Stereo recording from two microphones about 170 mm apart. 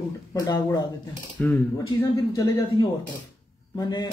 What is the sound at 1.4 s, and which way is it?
Speech, 10° left (ahead or behind).